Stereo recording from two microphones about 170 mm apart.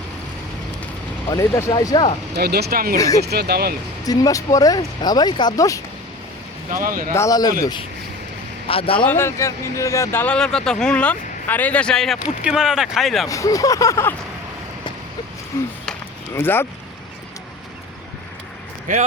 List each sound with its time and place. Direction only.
1.3 s speech: 15° left (ahead or behind)
2.3 s speech: 70° right (ahead or behind)
4.0 s speech: 20° left (ahead or behind)
6.8 s speech: 55° right (ahead or behind)
7.1 s speech: 20° left (ahead or behind)
9.0 s speech: 15° left (ahead or behind)
13.2 s speech: 20° left (ahead or behind)
15.5 s a sound: 20° left (ahead or behind)
16.3 s speech: 15° left (ahead or behind)
18.9 s speech: 45° right (ahead or behind)